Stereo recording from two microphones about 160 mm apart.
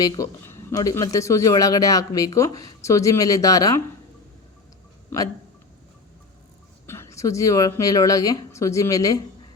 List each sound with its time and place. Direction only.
0.0 s speech: 20° left (ahead or behind)
5.1 s speech: 15° left (ahead or behind)
6.8 s speech: 15° left (ahead or behind)